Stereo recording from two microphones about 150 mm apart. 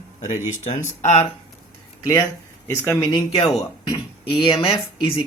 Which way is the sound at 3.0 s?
30° left (ahead or behind).